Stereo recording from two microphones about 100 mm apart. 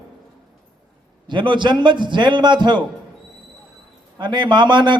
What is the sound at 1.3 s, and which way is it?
A man's voice, 50° right (ahead or behind).